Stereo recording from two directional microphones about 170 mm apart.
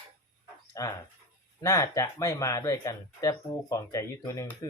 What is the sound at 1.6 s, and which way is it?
Speech, 20° left (ahead or behind).